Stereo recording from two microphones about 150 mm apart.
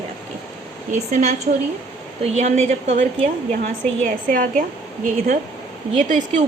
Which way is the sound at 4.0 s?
65° right (ahead or behind).